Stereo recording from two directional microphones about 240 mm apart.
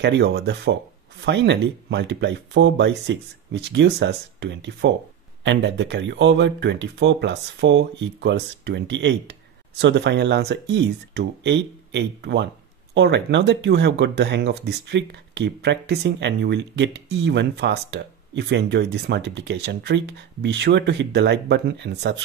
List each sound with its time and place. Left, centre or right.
0.0 s speech: right